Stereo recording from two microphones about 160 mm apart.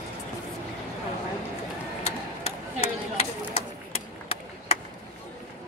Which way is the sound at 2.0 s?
40° left (ahead or behind).